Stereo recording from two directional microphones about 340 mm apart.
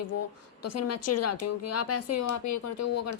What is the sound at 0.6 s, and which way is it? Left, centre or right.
A woman's voice, left.